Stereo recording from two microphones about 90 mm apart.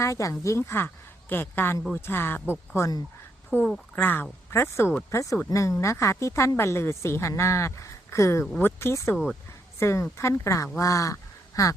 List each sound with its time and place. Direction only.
0.0 s a woman's voice: 35° left (ahead or behind)